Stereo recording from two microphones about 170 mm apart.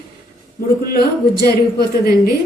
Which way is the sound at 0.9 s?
65° left (ahead or behind).